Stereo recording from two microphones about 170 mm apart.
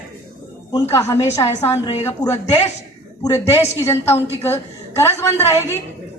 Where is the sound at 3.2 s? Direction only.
15° left (ahead or behind).